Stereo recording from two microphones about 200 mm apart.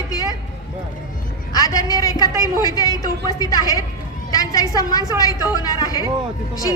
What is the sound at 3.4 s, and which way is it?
A woman's voice, 20° left (ahead or behind).